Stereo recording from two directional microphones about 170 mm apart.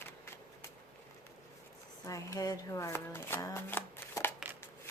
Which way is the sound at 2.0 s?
20° left (ahead or behind).